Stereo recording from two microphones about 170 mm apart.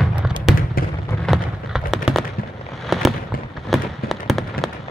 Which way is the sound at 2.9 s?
Centre (ahead or behind).